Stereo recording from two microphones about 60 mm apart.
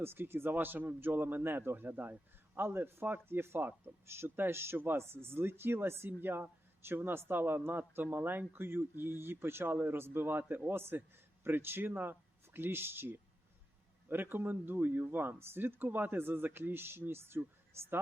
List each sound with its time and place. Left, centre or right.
0.0 s speech: right